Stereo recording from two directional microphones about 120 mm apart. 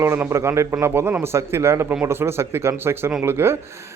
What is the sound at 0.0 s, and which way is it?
A man's voice, 20° right (ahead or behind).